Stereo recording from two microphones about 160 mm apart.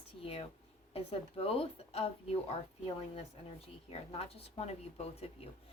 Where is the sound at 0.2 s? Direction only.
35° left (ahead or behind).